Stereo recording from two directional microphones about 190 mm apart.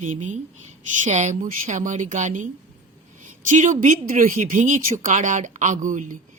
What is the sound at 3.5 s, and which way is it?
Speech, 40° right (ahead or behind).